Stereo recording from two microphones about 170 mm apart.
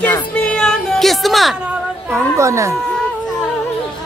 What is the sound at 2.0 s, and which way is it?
Singing, 15° right (ahead or behind).